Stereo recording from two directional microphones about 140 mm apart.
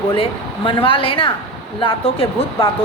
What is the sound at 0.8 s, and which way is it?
A woman's voice, 40° left (ahead or behind).